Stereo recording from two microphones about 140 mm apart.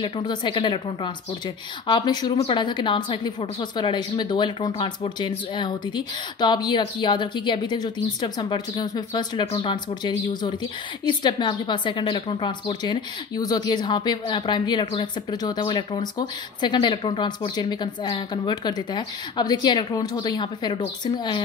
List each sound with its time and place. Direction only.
0.0 s a woman's voice: 35° left (ahead or behind)